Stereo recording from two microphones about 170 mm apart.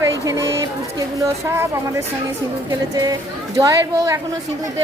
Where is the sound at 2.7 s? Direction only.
20° right (ahead or behind).